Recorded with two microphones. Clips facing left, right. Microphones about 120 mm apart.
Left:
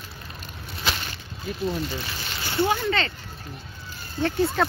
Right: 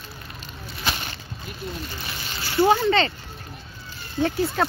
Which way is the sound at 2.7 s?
25° right (ahead or behind).